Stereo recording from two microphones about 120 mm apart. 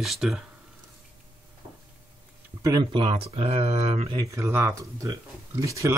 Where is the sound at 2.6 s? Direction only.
35° right (ahead or behind); by 4.1 s 65° right (ahead or behind).